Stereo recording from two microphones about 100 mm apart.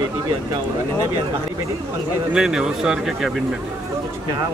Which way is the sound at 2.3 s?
5° right (ahead or behind).